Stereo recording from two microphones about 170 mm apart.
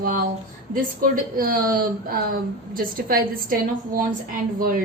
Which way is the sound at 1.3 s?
60° right (ahead or behind).